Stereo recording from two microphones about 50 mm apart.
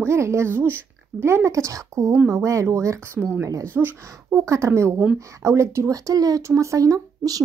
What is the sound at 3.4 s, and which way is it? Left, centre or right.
Speech, right.